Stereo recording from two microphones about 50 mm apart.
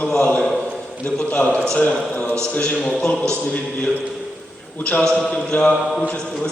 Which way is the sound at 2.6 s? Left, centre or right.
Centre.